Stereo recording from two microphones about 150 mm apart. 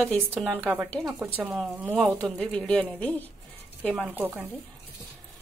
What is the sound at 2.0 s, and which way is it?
Speech, 5° left (ahead or behind).